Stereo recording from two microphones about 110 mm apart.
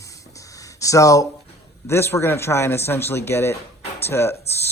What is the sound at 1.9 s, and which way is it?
Speech, 25° left (ahead or behind).